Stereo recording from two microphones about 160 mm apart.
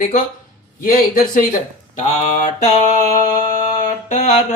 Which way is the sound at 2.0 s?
45° left (ahead or behind).